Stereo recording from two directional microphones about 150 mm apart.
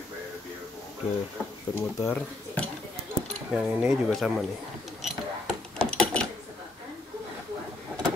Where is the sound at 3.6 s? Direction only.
5° right (ahead or behind).